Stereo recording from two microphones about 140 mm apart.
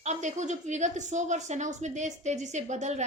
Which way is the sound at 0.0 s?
55° right (ahead or behind).